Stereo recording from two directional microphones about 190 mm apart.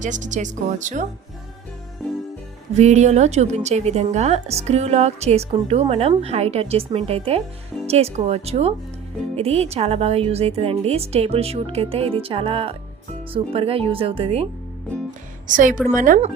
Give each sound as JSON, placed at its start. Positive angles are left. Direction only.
{"t": 0.0, "sound": "a woman's voice", "side_deg": -40}
{"t": 2.7, "sound": "a woman's voice", "side_deg": -35}
{"t": 15.4, "sound": "a woman's voice", "side_deg": -45}